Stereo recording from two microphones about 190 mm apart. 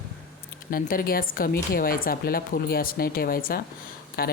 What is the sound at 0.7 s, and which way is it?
A woman's voice, 50° left (ahead or behind).